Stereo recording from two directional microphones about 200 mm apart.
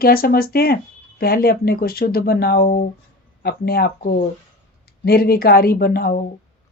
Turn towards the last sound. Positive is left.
turn(degrees=50)  # may be behind; listen again after turning